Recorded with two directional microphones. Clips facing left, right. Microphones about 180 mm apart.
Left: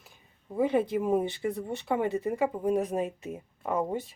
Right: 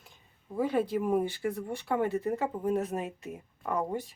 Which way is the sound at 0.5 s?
20° left (ahead or behind).